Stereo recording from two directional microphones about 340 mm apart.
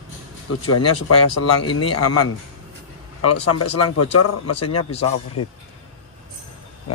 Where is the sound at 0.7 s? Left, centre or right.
Left.